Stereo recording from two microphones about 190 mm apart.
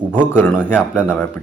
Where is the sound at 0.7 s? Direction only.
5° right (ahead or behind).